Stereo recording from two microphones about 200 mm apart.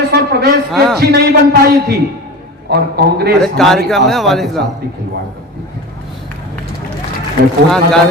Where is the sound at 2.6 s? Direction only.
50° right (ahead or behind).